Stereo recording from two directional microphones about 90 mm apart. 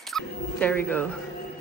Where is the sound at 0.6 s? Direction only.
15° left (ahead or behind).